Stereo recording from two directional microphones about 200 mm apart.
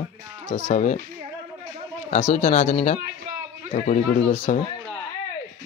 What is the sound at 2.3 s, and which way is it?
Speech, 35° left (ahead or behind).